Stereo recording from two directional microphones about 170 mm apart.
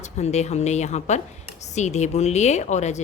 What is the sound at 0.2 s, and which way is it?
Speech, 40° left (ahead or behind).